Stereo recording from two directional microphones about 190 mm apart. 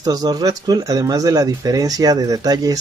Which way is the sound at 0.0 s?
20° right (ahead or behind).